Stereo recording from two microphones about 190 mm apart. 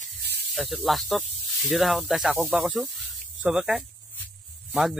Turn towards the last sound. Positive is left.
turn(degrees=0)  # may be behind; listen again after turning